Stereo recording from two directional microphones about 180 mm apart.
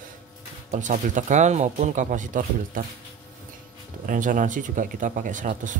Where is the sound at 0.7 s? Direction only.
45° right (ahead or behind).